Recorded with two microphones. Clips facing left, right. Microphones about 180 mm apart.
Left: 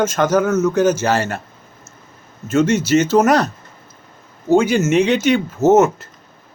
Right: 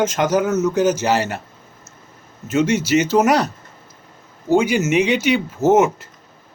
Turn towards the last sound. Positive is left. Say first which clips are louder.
# left 2 dB
turn(degrees=-10)  # may be behind; listen again after turning